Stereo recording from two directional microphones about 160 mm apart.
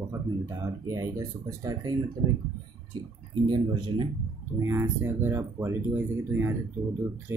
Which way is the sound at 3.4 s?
30° right (ahead or behind).